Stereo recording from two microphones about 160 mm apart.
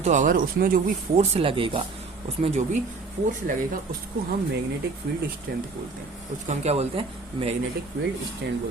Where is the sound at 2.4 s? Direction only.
45° right (ahead or behind).